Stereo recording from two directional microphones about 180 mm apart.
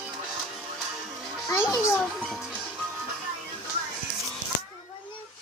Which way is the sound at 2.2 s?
Centre (ahead or behind).